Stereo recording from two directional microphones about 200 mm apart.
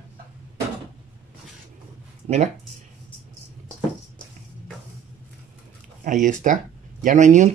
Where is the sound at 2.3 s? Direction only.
30° right (ahead or behind).